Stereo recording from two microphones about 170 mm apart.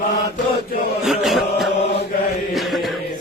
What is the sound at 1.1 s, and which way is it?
Chant, centre (ahead or behind).